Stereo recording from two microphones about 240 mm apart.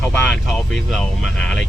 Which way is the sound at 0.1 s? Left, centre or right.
Centre.